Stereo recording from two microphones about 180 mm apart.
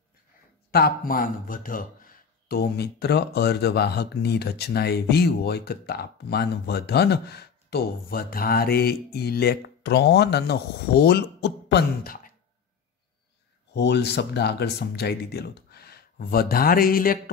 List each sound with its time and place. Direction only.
0.7 s speech: 60° left (ahead or behind)
13.7 s speech: 70° left (ahead or behind)